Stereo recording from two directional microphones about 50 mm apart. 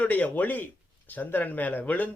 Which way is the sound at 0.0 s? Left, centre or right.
Left.